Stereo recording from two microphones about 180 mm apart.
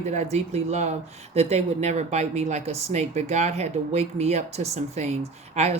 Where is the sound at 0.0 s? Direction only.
40° right (ahead or behind).